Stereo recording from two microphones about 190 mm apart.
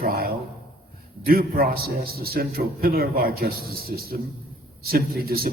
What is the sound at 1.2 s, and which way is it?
A man's voice, 50° right (ahead or behind).